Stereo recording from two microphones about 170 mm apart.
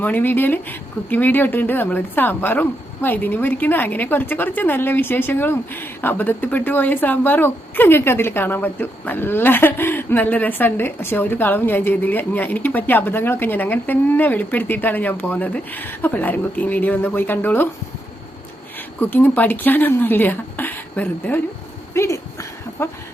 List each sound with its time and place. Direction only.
0.0 s speech: 10° left (ahead or behind)
18.9 s speech: 10° left (ahead or behind)
21.9 s a sound: 15° left (ahead or behind)